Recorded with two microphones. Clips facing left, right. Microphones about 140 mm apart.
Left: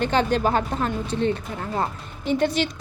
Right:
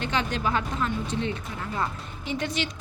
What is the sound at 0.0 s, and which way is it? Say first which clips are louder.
A woman's voice: left 7 dB; 35° left (ahead or behind).